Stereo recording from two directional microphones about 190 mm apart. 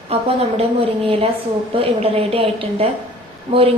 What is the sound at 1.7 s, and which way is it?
A woman's voice, 30° right (ahead or behind).